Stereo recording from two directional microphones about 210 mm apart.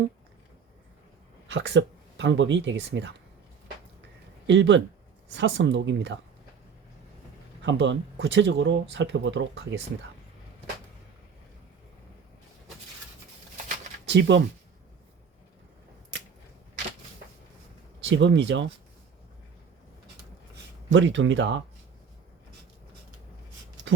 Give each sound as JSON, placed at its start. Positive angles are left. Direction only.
{"t": 1.5, "sound": "speech", "side_deg": -60}
{"t": 4.4, "sound": "speech", "side_deg": -60}
{"t": 7.6, "sound": "speech", "side_deg": -60}
{"t": 14.0, "sound": "speech", "side_deg": -55}
{"t": 18.0, "sound": "speech", "side_deg": -60}
{"t": 20.9, "sound": "speech", "side_deg": -60}